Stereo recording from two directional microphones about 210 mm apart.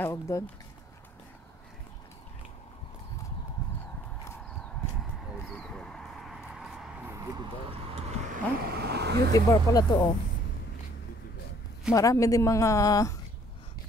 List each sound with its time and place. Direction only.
0.0 s speech: 10° left (ahead or behind)
5.3 s a sound: centre (ahead or behind)
7.7 s vehicle: 30° right (ahead or behind)
8.5 s vehicle: 50° right (ahead or behind)
9.3 s speech: 15° left (ahead or behind)
11.9 s speech: 15° left (ahead or behind)